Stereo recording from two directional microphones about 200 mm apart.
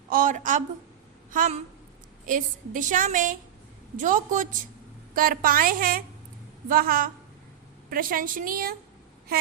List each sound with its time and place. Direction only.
0.1 s a woman's voice: 40° right (ahead or behind)